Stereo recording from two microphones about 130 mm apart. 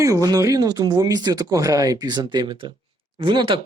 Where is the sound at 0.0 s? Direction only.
25° right (ahead or behind).